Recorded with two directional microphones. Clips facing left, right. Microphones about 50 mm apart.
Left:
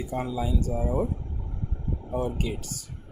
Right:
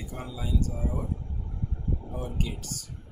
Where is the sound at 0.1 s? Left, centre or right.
Left.